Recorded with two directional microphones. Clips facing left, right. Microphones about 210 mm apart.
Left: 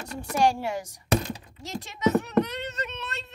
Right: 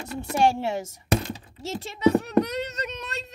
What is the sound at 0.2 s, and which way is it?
Speech, 25° right (ahead or behind).